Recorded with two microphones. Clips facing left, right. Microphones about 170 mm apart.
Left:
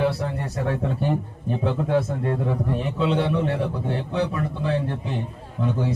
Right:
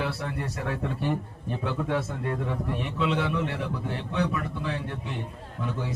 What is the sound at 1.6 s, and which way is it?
A man's voice, 30° left (ahead or behind).